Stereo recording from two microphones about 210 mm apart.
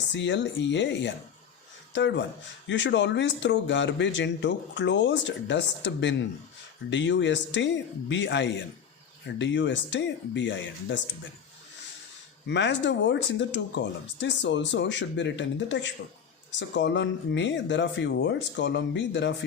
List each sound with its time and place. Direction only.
0.1 s a man's voice: 60° left (ahead or behind)
12.5 s a man's voice: 55° left (ahead or behind)